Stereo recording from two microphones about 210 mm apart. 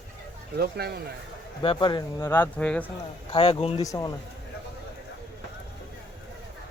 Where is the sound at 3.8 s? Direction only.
15° left (ahead or behind).